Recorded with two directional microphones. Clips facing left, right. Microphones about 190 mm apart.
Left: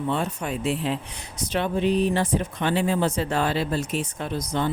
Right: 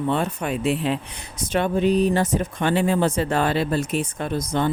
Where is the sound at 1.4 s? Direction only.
50° right (ahead or behind).